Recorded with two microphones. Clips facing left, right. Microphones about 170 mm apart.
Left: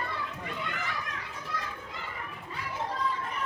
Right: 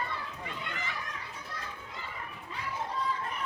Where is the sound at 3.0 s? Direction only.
90° left.